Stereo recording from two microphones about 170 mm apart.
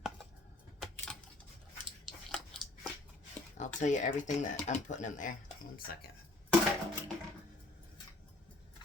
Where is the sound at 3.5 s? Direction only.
45° left (ahead or behind).